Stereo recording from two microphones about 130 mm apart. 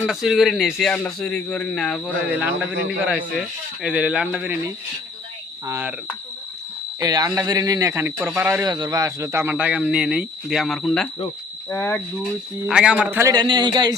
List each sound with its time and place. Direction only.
0.0 s speech: centre (ahead or behind)
2.4 s speech: 10° right (ahead or behind)
5.6 s speech: 20° right (ahead or behind)
7.0 s speech: 30° right (ahead or behind)
8.6 s speech: 30° right (ahead or behind); by 11.1 s 5° left (ahead or behind)
11.7 s cricket: 15° left (ahead or behind)
12.6 s speech: 5° right (ahead or behind)
13.3 s speech: 35° right (ahead or behind)